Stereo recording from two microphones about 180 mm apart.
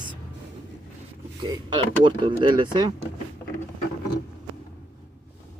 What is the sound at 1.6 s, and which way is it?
Speech, 25° right (ahead or behind).